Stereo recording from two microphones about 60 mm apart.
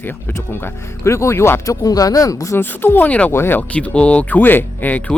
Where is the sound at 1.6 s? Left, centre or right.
Left.